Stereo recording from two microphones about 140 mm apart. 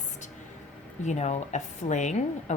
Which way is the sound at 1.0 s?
55° left (ahead or behind).